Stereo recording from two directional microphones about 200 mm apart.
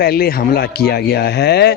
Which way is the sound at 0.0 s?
50° left (ahead or behind).